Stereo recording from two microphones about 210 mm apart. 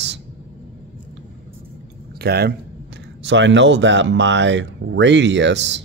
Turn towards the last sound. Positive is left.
turn(degrees=-60)  # may be behind; listen again after turning